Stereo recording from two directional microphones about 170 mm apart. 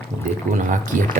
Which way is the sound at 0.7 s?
50° right (ahead or behind).